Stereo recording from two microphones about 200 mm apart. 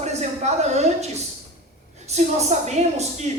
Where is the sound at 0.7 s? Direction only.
35° right (ahead or behind).